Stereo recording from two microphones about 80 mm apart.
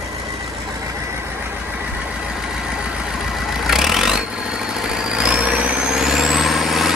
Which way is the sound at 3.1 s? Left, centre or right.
Centre.